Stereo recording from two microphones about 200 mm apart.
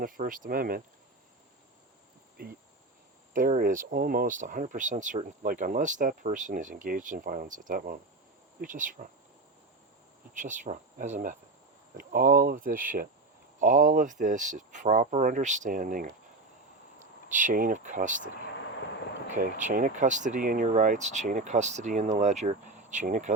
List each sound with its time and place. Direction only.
0.0 s speech: 45° right (ahead or behind)
2.4 s speech: 45° right (ahead or behind)
10.3 s speech: 40° right (ahead or behind)
19.3 s speech: 40° right (ahead or behind)